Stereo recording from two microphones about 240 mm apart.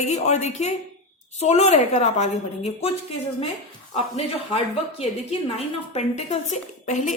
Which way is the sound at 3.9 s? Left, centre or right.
Left.